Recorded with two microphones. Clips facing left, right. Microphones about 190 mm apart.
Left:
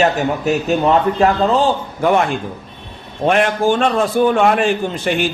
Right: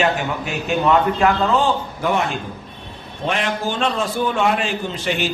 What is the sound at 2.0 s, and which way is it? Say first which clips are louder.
Speech: left 7 dB; 50° left (ahead or behind).